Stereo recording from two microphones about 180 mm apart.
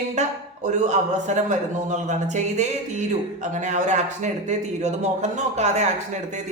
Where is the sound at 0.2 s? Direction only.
40° right (ahead or behind).